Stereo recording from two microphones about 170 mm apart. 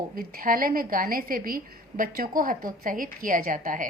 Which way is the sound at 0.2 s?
55° right (ahead or behind).